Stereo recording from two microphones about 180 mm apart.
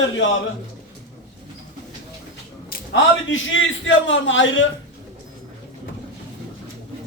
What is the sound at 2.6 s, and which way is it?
A man's voice, 90° left.